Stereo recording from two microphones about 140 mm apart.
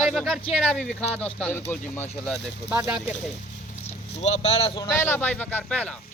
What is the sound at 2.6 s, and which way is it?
Speech, 10° right (ahead or behind).